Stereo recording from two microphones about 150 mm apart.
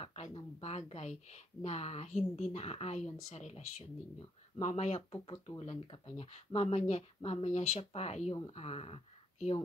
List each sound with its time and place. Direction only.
0.0 s speech: 45° left (ahead or behind)